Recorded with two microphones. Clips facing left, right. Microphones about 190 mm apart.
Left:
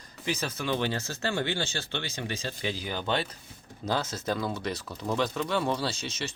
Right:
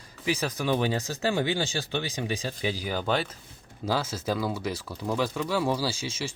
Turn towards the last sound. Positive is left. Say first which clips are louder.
# right 2 dB
turn(degrees=-10)  # may be behind; listen again after turning